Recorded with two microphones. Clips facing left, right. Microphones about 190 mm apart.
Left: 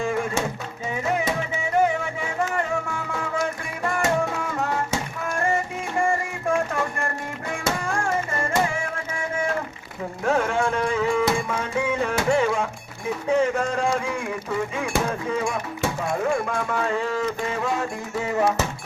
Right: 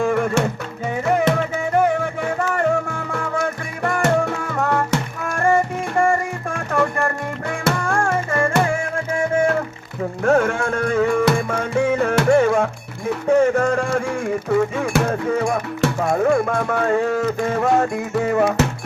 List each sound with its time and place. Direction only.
0.0 s a sound: 60° right (ahead or behind)
1.1 s music: 65° right (ahead or behind)
7.6 s music: 60° right (ahead or behind)
10.2 s music: 50° right (ahead or behind)
12.4 s music: 50° right (ahead or behind)
13.2 s a sound: 50° right (ahead or behind)
15.0 s music: 50° right (ahead or behind)
16.0 s music: 45° right (ahead or behind)